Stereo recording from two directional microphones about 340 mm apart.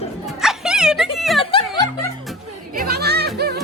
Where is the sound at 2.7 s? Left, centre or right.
Right.